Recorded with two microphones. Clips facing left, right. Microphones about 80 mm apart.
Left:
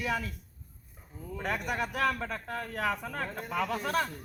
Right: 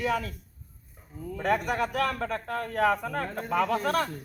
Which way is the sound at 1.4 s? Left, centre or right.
Right.